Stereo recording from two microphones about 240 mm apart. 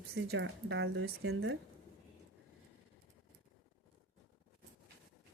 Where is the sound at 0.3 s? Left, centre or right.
Right.